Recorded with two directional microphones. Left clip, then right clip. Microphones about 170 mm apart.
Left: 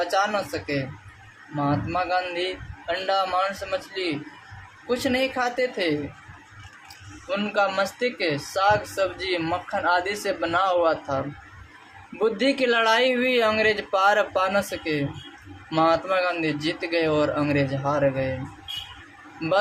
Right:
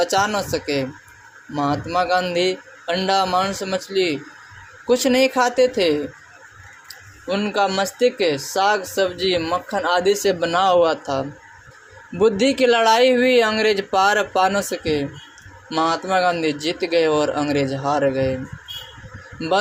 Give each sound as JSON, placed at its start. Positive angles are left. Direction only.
{"t": 0.0, "sound": "speech", "side_deg": -30}
{"t": 7.3, "sound": "speech", "side_deg": -25}
{"t": 12.2, "sound": "speech", "side_deg": -25}